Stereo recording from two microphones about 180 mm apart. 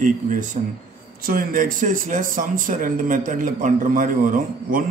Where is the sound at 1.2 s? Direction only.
50° right (ahead or behind).